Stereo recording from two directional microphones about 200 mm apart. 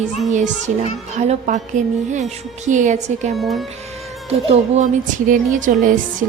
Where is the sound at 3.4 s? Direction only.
Centre (ahead or behind).